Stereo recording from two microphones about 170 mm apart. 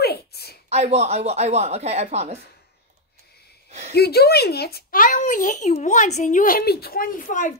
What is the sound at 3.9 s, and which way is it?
Speech, 70° left (ahead or behind).